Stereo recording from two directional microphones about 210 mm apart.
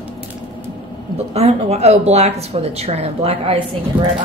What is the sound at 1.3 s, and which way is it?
Speech, 30° right (ahead or behind).